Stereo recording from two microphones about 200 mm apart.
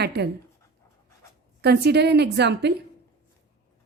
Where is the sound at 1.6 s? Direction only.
55° right (ahead or behind).